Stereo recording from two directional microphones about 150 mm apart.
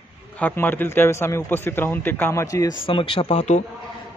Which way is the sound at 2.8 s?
35° left (ahead or behind).